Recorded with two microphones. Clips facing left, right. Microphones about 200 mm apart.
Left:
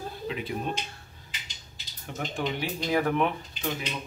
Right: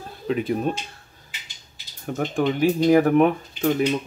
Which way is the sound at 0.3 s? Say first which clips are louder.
Right 12 dB; 45° right (ahead or behind).